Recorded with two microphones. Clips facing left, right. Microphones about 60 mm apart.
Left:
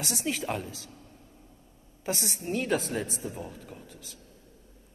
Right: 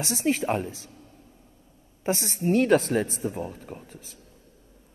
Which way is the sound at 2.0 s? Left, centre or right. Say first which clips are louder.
Right 7 dB; right.